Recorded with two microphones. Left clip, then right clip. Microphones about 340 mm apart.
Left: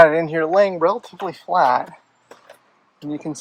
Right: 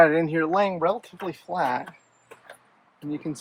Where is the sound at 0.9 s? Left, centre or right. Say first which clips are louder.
Left 5 dB; left.